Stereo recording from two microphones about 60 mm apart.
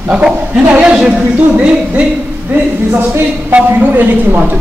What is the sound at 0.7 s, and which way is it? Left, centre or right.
A man's voice, right.